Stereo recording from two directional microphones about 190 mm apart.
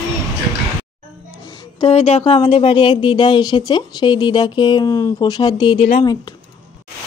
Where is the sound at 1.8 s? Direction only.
30° left (ahead or behind).